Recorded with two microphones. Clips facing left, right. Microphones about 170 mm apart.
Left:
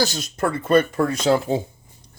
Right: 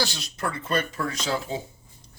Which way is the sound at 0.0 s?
45° left (ahead or behind).